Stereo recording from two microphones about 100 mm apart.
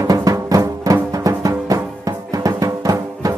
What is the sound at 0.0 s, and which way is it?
Music, 35° right (ahead or behind).